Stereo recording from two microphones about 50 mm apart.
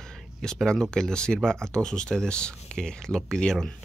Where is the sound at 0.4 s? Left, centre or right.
Centre.